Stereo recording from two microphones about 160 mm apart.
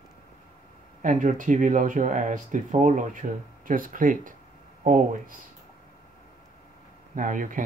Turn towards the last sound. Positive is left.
turn(degrees=-55)  # may be behind; listen again after turning